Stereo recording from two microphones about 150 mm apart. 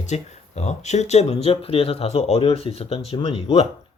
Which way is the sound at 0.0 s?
50° left (ahead or behind).